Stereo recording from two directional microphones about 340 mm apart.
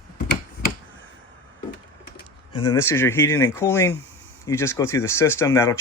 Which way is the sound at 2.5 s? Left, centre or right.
Centre.